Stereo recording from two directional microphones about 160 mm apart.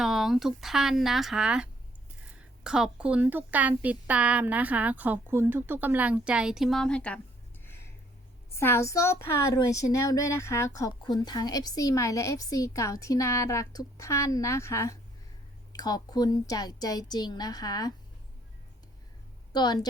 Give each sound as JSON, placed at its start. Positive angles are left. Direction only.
{"t": 0.0, "sound": "a woman's voice", "side_deg": 0}
{"t": 7.6, "sound": "a sound", "side_deg": 15}
{"t": 8.5, "sound": "speech", "side_deg": 15}
{"t": 19.5, "sound": "speech", "side_deg": 25}